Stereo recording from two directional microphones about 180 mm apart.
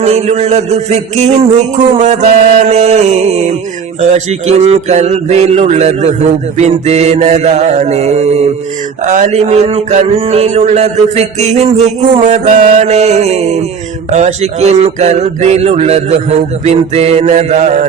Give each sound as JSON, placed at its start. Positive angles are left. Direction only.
{"t": 0.0, "sound": "mantra", "side_deg": -35}